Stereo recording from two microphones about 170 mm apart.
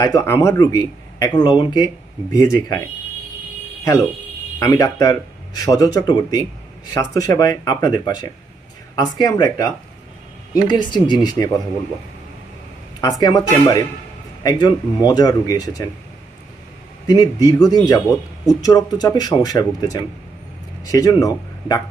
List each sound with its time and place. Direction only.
0.0 s speech: 20° left (ahead or behind)
4.6 s speech: 20° left (ahead or behind)
13.0 s speech: 20° left (ahead or behind)
17.1 s speech: 20° left (ahead or behind)